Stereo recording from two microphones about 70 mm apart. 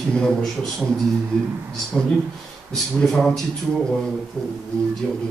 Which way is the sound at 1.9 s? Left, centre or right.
Centre.